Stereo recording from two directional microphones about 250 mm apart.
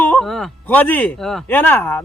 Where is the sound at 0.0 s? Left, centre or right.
Centre.